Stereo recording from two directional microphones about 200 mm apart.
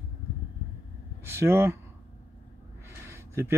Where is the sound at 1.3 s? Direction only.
15° right (ahead or behind).